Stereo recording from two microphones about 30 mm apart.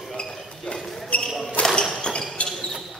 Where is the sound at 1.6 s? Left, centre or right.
Left.